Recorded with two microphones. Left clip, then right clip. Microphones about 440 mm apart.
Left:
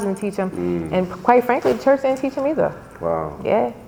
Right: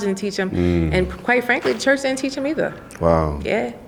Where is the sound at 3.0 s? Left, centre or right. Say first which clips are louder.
Right 5 dB; right.